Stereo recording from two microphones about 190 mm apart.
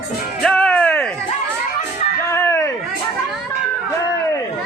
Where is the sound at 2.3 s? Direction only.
15° left (ahead or behind).